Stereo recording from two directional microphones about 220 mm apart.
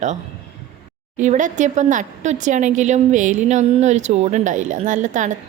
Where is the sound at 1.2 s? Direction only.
35° right (ahead or behind).